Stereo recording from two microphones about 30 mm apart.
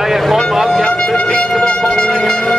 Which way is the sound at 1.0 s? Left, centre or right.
Left.